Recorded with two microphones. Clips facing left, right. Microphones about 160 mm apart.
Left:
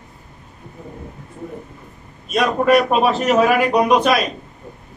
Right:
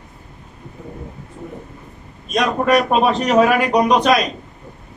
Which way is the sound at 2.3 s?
5° left (ahead or behind).